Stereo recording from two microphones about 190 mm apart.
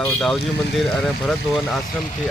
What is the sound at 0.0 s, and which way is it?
Speech, centre (ahead or behind).